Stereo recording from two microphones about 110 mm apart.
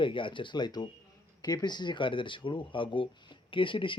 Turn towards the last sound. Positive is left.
turn(degrees=50)  # may be behind; listen again after turning